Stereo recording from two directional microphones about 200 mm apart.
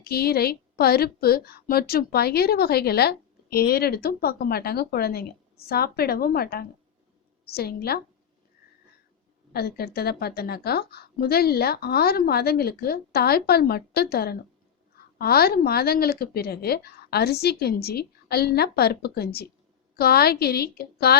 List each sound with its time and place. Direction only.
0.0 s a woman's voice: 50° left (ahead or behind)
9.5 s a woman's voice: 50° left (ahead or behind)